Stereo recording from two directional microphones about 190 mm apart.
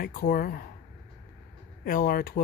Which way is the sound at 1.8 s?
50° left (ahead or behind).